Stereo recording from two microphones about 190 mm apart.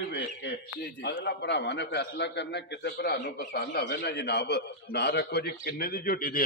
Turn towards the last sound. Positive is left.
turn(degrees=50)  # may be behind; listen again after turning